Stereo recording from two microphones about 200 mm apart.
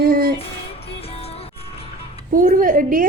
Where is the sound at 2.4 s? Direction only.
40° right (ahead or behind).